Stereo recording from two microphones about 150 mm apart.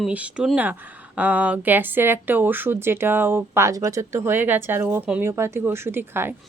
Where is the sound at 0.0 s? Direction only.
10° right (ahead or behind).